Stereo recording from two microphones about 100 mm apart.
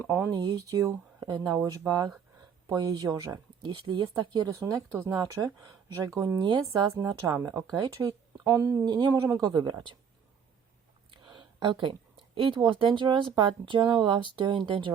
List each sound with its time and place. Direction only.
0.0 s speech: 20° right (ahead or behind)
0.3 s speech: 40° right (ahead or behind)
3.6 s speech: 50° right (ahead or behind); by 8.8 s 30° right (ahead or behind)
8.9 s speech: 45° right (ahead or behind)
11.1 s a sound: 55° right (ahead or behind)
12.3 s speech: 60° right (ahead or behind)